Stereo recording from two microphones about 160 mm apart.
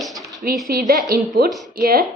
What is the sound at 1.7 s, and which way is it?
Speech, 65° right (ahead or behind).